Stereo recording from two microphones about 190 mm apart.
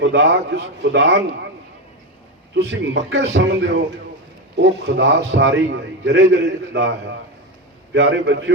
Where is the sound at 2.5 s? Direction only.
75° right (ahead or behind).